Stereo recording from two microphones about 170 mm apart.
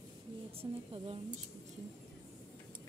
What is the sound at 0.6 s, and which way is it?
Speech, 30° right (ahead or behind).